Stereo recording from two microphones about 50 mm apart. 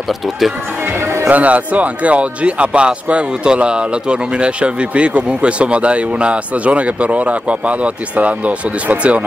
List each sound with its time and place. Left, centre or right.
1.3 s speech: right